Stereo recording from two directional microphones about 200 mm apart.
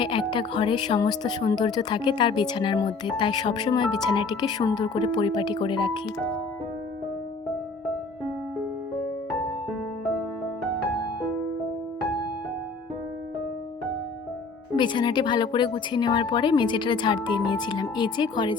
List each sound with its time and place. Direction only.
0.0 s speech: 25° left (ahead or behind)
9.6 s music: centre (ahead or behind)
14.8 s speech: 20° left (ahead or behind)